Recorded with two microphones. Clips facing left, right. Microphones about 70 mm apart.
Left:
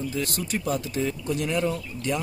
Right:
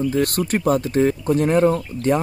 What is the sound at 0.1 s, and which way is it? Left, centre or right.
Speech, right.